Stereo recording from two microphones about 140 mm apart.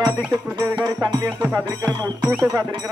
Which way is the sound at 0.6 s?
25° right (ahead or behind).